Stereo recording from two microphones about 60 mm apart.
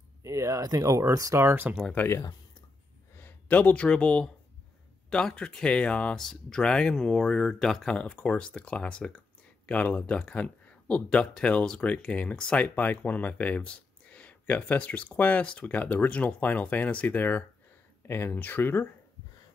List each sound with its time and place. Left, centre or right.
0.2 s speech: right
1.4 s speech: right
2.0 s speech: left
3.2 s a sound: left
3.8 s speech: centre
6.1 s speech: centre; by 18.9 s left